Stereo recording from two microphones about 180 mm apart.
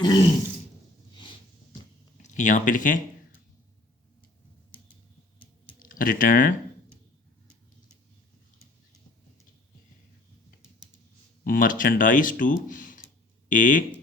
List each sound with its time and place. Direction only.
0.0 s throat clearing: 25° left (ahead or behind)
1.1 s a sound: 25° left (ahead or behind)
2.2 s speech: 45° left (ahead or behind)
5.8 s speech: 50° left (ahead or behind)
11.4 s speech: 50° left (ahead or behind)